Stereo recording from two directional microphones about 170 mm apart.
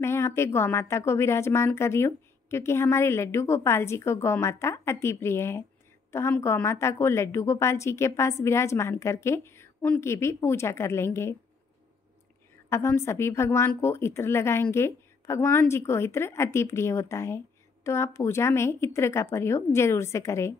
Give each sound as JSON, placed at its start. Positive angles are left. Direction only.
{"t": 0.0, "sound": "a woman's voice", "side_deg": 15}
{"t": 12.6, "sound": "a woman's voice", "side_deg": 15}